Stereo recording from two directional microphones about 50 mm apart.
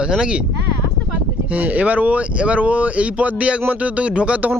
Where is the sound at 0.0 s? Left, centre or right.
Centre.